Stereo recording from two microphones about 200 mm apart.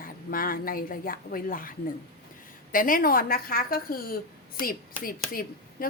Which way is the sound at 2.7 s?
45° left (ahead or behind).